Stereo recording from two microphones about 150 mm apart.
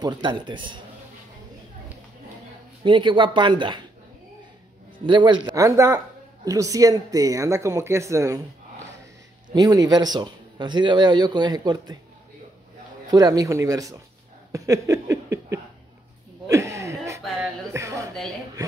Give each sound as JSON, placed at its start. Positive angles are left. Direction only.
{"t": 0.0, "sound": "speech", "side_deg": -30}
{"t": 2.8, "sound": "speech", "side_deg": -30}
{"t": 4.9, "sound": "speech", "side_deg": -30}
{"t": 9.5, "sound": "speech", "side_deg": -25}
{"t": 13.1, "sound": "speech", "side_deg": -25}
{"t": 16.4, "sound": "a sound", "side_deg": -20}
{"t": 17.7, "sound": "speech", "side_deg": -20}